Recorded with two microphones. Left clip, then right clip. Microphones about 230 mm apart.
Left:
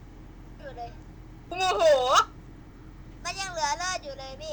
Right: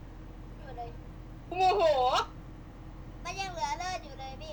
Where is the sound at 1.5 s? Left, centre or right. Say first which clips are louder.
Left 4 dB; left.